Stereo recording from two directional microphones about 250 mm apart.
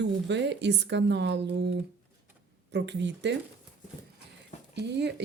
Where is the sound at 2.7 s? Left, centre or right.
Right.